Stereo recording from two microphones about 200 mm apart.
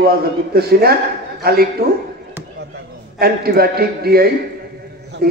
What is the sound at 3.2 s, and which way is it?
A man's voice, 50° right (ahead or behind).